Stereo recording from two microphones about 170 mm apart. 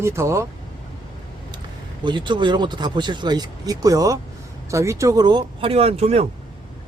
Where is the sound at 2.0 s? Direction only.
25° right (ahead or behind).